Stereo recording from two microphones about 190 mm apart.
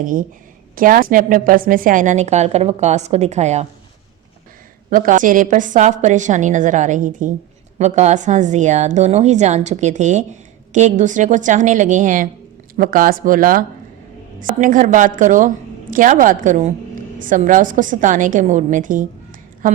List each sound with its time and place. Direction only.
0.0 s a woman's voice: 45° right (ahead or behind)
4.9 s a woman's voice: 45° right (ahead or behind)